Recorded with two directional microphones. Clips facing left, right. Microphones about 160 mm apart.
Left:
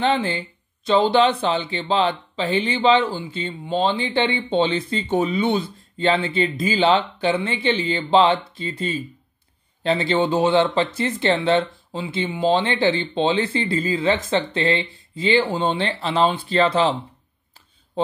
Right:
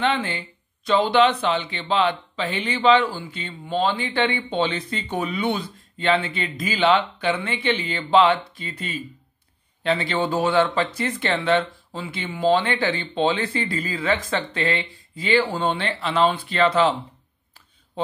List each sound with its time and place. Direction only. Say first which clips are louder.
0.0 s speech: left 3 dB; 35° left (ahead or behind)